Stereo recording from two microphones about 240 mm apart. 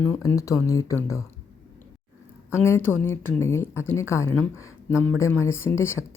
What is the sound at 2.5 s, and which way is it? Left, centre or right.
Speech, centre.